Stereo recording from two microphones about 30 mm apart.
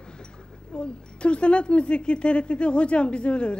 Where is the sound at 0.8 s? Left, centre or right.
Left.